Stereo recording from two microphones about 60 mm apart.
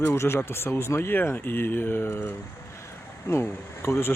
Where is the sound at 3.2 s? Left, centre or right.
Left.